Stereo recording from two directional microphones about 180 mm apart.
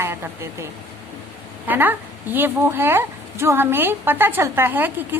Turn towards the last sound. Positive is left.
turn(degrees=-10)  # may be behind; listen again after turning